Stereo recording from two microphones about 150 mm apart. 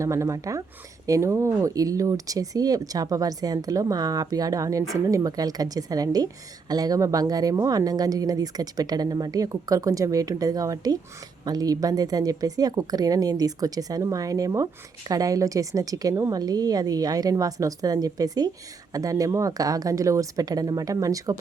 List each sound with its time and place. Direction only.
0.0 s a woman's voice: 20° right (ahead or behind)